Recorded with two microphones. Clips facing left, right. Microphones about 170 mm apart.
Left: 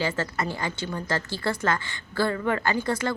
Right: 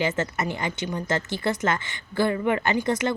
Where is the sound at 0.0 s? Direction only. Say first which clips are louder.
Right 2 dB; 20° right (ahead or behind).